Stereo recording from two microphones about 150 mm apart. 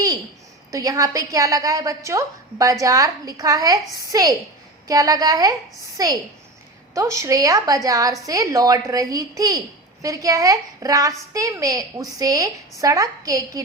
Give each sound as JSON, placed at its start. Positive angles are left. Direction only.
{"t": 0.7, "sound": "a woman's voice", "side_deg": -25}